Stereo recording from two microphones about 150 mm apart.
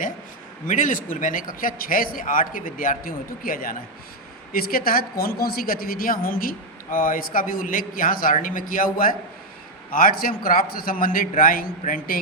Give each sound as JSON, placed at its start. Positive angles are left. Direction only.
{"t": 0.7, "sound": "a man's voice", "side_deg": 60}